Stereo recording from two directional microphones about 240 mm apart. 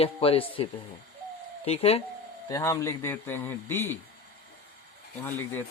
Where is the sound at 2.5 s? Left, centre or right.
Centre.